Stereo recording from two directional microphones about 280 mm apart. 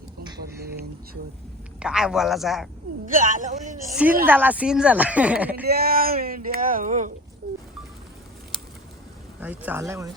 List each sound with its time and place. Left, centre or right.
0.3 s a sound: right
1.8 s speech: centre
3.1 s a man's voice: right
4.3 s speech: centre
5.6 s speech: right
9.4 s speech: centre